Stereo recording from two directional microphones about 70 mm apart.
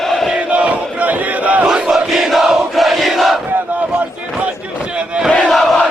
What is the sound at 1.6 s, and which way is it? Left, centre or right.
Crowd, centre.